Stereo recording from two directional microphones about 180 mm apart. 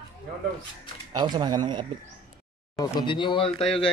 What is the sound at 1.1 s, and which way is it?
Speech, 25° right (ahead or behind).